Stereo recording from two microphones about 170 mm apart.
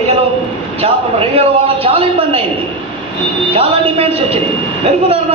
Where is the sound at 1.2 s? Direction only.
35° right (ahead or behind).